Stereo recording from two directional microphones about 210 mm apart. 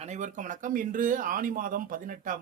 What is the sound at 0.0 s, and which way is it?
Speech, 35° right (ahead or behind).